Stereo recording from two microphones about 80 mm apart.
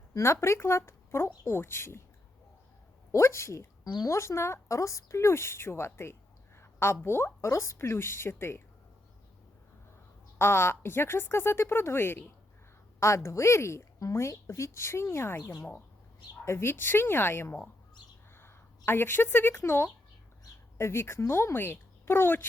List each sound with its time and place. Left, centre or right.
0.2 s a woman's voice: left
3.1 s a woman's voice: left
10.3 s a woman's voice: left